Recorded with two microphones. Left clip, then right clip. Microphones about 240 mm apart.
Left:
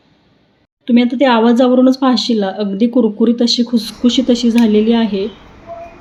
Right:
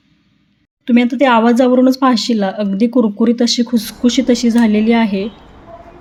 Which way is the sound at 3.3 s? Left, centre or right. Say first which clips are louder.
Left 1 dB; right.